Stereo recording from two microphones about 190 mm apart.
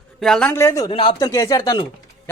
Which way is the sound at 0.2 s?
5° left (ahead or behind).